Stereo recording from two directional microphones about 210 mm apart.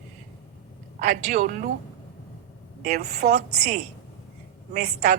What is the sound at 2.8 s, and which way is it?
Speech, 45° right (ahead or behind).